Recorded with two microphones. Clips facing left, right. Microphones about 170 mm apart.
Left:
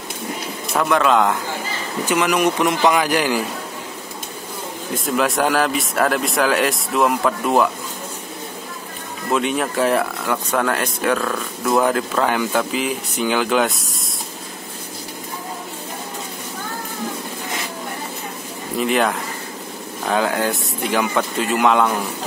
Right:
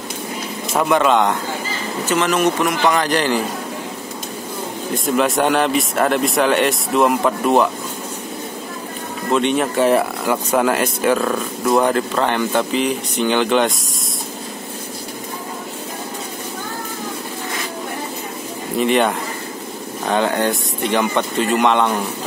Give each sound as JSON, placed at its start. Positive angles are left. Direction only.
{"t": 0.7, "sound": "speech", "side_deg": 0}
{"t": 2.0, "sound": "a man's voice", "side_deg": 10}
{"t": 3.0, "sound": "speech", "side_deg": 10}
{"t": 5.0, "sound": "speech", "side_deg": 0}
{"t": 9.3, "sound": "speech", "side_deg": 5}
{"t": 11.8, "sound": "speech", "side_deg": 0}
{"t": 18.8, "sound": "speech", "side_deg": 0}